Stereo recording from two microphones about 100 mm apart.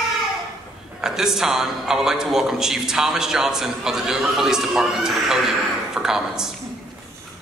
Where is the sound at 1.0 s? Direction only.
5° right (ahead or behind).